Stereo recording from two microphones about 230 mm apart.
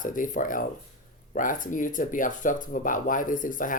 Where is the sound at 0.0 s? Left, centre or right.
Left.